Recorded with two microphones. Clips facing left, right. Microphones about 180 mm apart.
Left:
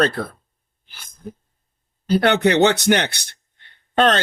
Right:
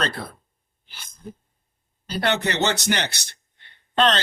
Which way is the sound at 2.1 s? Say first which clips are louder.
Left 8 dB; 60° left (ahead or behind).